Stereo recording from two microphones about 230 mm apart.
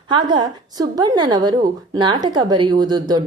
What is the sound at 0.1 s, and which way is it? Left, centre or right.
A woman's voice, centre.